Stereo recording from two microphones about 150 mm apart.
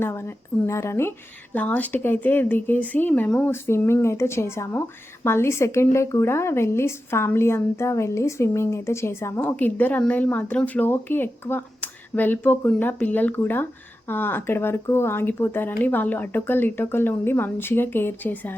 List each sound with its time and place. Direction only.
0.0 s speech: 15° left (ahead or behind)